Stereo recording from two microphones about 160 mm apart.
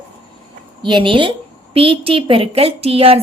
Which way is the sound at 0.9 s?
30° right (ahead or behind).